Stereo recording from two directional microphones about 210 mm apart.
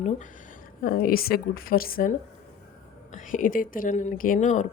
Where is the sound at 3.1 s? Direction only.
40° left (ahead or behind).